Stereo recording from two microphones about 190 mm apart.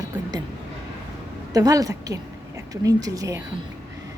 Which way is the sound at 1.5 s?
20° right (ahead or behind).